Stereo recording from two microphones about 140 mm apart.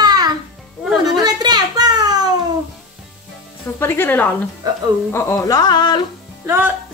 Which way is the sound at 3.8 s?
15° left (ahead or behind).